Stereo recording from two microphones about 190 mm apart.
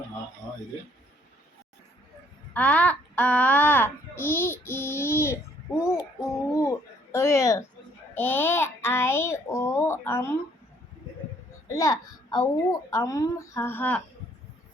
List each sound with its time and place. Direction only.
2.5 s a child's voice: 5° left (ahead or behind)
6.5 s a sound: 15° left (ahead or behind)
8.1 s a child's voice: 10° left (ahead or behind)
11.7 s a child's voice: 15° left (ahead or behind)